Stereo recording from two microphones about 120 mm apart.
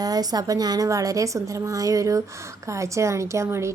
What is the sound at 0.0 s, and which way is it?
Speech, 30° right (ahead or behind).